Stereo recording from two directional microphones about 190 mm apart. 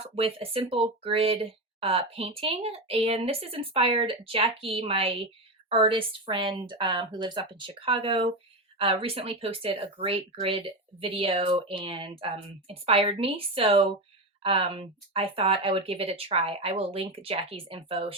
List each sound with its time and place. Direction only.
0.2 s speech: 30° right (ahead or behind)